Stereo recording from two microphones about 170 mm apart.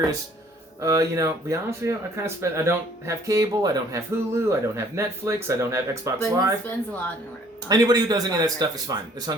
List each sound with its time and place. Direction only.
0.8 s speech: 20° right (ahead or behind)
7.7 s speech: 20° right (ahead or behind)